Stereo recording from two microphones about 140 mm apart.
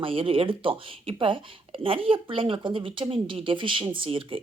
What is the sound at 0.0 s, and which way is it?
Speech, 40° right (ahead or behind).